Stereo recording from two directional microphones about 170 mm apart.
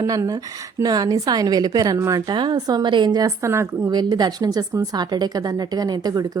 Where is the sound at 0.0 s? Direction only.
20° right (ahead or behind).